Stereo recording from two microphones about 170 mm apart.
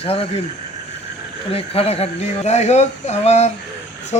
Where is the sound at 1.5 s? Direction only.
35° left (ahead or behind).